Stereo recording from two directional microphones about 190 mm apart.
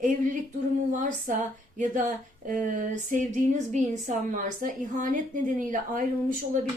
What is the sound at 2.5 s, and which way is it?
Speech, 45° right (ahead or behind).